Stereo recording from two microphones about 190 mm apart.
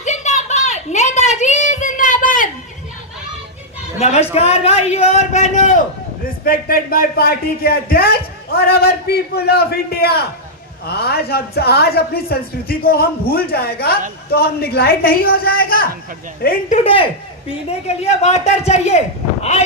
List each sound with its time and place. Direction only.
0.0 s a sound: 40° left (ahead or behind)
4.0 s speech: 35° left (ahead or behind)
6.2 s a woman's voice: 50° left (ahead or behind)
16.7 s speech: 30° left (ahead or behind)